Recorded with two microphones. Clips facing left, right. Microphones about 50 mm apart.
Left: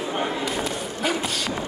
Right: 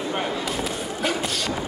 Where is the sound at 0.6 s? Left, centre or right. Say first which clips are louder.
Even; centre.